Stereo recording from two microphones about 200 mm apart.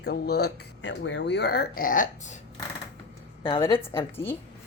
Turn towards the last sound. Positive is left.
turn(degrees=10)  # may be behind; listen again after turning